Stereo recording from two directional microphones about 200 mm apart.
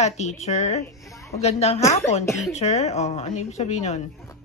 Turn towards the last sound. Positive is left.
turn(degrees=35)  # may be behind; listen again after turning